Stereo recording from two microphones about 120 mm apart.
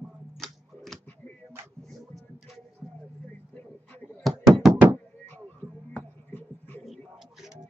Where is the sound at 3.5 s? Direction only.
15° left (ahead or behind).